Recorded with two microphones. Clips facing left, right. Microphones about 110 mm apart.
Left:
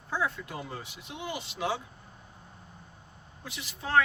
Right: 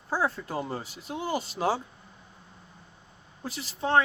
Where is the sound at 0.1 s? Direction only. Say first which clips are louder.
Right 4 dB; 35° right (ahead or behind).